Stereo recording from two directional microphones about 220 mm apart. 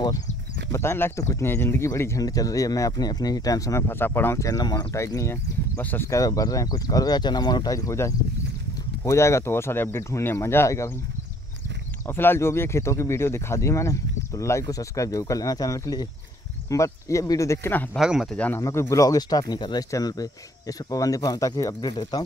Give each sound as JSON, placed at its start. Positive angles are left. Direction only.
{"t": 0.7, "sound": "speech", "side_deg": 10}
{"t": 12.1, "sound": "speech", "side_deg": 10}
{"t": 18.0, "sound": "speech", "side_deg": 0}